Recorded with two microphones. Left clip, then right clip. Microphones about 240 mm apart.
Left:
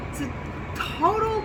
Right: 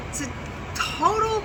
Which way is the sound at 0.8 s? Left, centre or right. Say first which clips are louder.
Right 1 dB; centre.